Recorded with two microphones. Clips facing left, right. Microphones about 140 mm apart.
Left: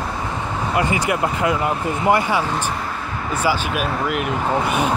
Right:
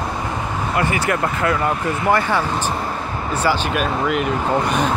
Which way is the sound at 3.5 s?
5° left (ahead or behind).